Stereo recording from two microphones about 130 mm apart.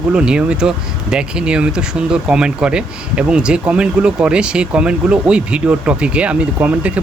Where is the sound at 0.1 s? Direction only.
5° right (ahead or behind).